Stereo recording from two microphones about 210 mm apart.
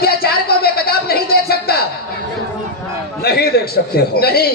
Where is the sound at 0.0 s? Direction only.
45° left (ahead or behind).